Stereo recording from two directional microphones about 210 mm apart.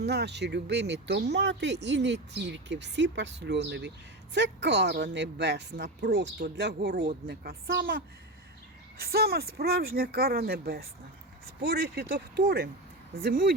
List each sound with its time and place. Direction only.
0.0 s speech: 50° right (ahead or behind)